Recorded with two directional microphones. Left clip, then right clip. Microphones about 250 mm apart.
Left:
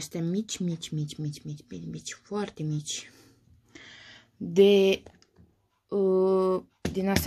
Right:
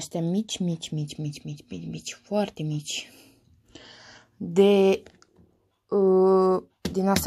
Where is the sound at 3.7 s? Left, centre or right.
Centre.